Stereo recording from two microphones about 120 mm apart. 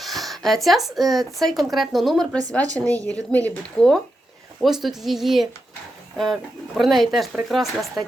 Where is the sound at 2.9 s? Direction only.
10° left (ahead or behind).